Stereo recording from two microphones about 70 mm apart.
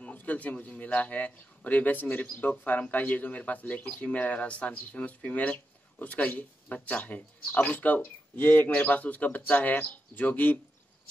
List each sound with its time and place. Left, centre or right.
0.0 s a man's voice: left